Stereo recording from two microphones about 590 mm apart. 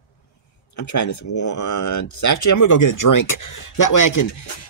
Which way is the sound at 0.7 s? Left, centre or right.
Left.